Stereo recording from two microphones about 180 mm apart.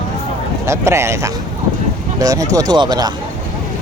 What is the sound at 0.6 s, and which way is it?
Speech, 15° right (ahead or behind).